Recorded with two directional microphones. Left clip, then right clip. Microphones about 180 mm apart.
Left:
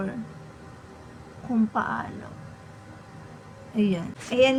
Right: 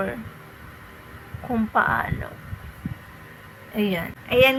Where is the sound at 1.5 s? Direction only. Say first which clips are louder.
Right 6 dB; 20° right (ahead or behind).